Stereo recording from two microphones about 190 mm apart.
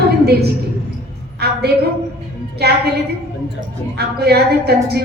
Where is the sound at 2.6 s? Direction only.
55° right (ahead or behind).